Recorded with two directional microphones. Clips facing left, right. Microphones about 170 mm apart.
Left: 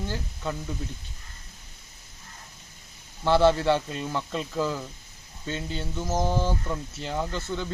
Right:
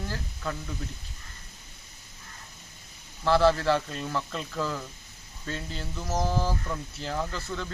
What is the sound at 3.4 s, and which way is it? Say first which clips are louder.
Speech: left 2 dB; 25° left (ahead or behind).